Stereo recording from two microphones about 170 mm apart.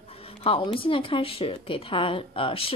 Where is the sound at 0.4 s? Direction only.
30° left (ahead or behind).